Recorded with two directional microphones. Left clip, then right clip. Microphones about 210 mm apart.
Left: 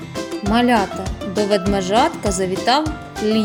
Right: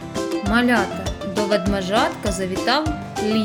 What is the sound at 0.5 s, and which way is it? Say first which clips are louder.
Speech: left 3 dB; 15° left (ahead or behind).